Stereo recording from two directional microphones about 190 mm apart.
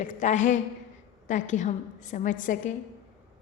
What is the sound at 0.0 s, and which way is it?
A woman's voice, 40° left (ahead or behind).